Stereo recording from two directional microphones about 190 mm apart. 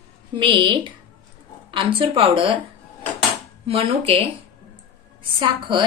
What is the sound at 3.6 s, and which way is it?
Speech, 30° right (ahead or behind).